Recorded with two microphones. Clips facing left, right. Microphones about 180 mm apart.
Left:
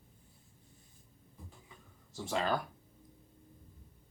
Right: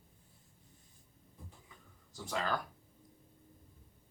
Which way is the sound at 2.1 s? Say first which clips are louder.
Left 3 dB; 25° left (ahead or behind).